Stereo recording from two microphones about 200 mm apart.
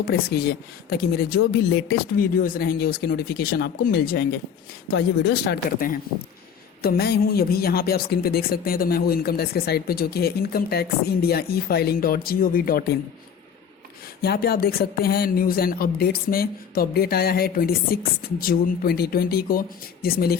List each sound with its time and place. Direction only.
0.1 s speech: 50° left (ahead or behind)
14.2 s speech: 50° left (ahead or behind)